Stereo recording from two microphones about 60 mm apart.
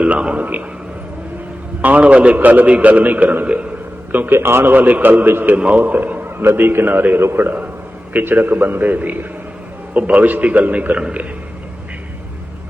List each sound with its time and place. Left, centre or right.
0.0 s a man's voice: centre
1.8 s a man's voice: right
4.4 s a man's voice: right
5.5 s a man's voice: right
6.2 s a man's voice: right; by 11.3 s centre